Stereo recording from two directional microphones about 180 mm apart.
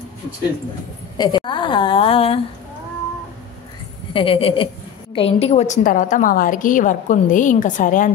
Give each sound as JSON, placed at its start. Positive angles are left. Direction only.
{"t": 1.1, "sound": "a woman's voice", "side_deg": 25}
{"t": 4.1, "sound": "a woman's voice", "side_deg": 30}